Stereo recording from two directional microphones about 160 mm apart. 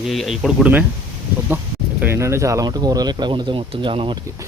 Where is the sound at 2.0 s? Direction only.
15° right (ahead or behind).